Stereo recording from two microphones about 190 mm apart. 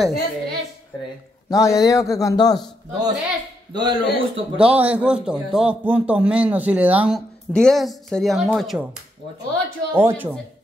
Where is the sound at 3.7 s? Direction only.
25° right (ahead or behind).